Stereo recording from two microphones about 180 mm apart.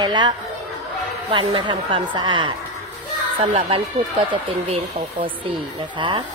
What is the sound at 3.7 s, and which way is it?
Speech, 30° right (ahead or behind).